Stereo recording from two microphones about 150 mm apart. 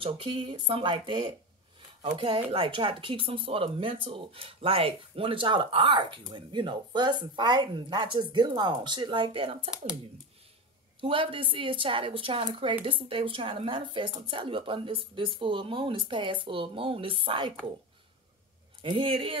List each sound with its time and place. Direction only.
0.0 s speech: 35° right (ahead or behind)
11.0 s speech: 35° right (ahead or behind)
18.8 s speech: 35° right (ahead or behind)